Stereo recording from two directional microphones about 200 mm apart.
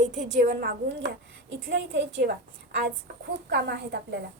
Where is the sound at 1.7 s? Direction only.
65° right (ahead or behind).